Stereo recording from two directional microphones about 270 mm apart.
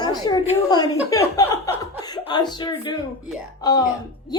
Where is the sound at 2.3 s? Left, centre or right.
Centre.